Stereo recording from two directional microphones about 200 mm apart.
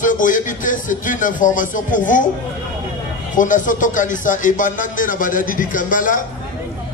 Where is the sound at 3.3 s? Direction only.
40° left (ahead or behind).